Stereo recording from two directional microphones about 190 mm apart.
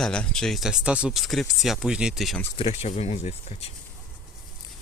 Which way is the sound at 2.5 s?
30° left (ahead or behind).